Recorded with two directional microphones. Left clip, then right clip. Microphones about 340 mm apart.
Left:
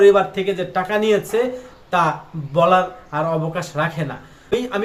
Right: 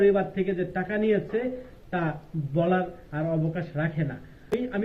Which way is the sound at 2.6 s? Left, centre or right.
Left.